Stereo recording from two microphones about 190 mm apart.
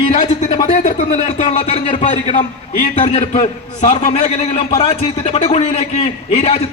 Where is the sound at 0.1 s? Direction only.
35° left (ahead or behind).